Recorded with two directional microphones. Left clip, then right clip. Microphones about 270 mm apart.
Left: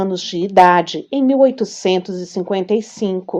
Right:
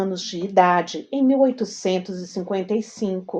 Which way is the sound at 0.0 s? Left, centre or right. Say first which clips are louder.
Left 6 dB; left.